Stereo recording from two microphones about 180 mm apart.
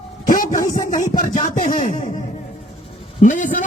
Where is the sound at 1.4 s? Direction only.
45° left (ahead or behind).